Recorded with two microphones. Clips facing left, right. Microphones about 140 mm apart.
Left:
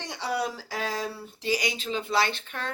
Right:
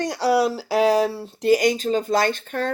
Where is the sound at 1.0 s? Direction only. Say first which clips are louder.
Right 11 dB; 40° right (ahead or behind).